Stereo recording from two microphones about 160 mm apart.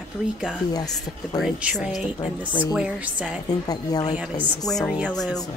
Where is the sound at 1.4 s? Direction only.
Centre (ahead or behind).